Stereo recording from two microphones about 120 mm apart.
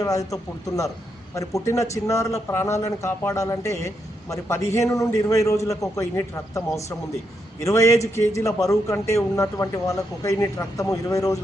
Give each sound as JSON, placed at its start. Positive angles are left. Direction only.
{"t": 0.0, "sound": "speech", "side_deg": 30}
{"t": 1.4, "sound": "a man's voice", "side_deg": 25}